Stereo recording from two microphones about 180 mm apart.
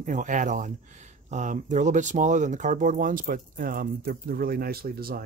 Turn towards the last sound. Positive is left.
turn(degrees=-55)  # may be behind; listen again after turning